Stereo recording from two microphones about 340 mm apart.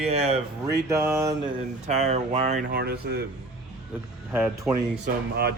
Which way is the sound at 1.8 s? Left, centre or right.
Centre.